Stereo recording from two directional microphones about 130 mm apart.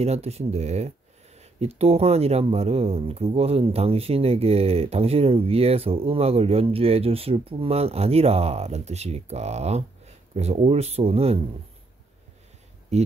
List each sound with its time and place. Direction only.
0.0 s speech: 55° right (ahead or behind)
12.9 s speech: 60° right (ahead or behind)